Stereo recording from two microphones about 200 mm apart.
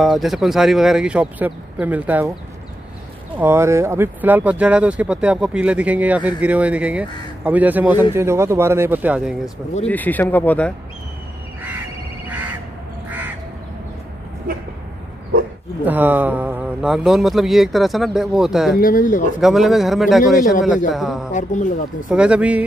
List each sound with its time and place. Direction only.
0.0 s speech: centre (ahead or behind)
3.3 s speech: 10° right (ahead or behind)
9.8 s speech: 10° left (ahead or behind)
15.8 s speech: 10° right (ahead or behind)
18.8 s speech: 45° left (ahead or behind)
19.4 s speech: centre (ahead or behind)
20.3 s speech: 45° left (ahead or behind)
20.9 s speech: centre (ahead or behind)
21.3 s speech: 40° left (ahead or behind)
22.1 s speech: 5° right (ahead or behind)